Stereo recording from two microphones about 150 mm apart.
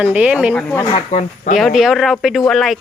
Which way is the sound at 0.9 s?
50° left (ahead or behind).